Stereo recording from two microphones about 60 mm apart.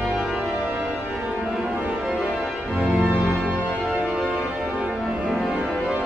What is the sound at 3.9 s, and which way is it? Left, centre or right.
Organ, right.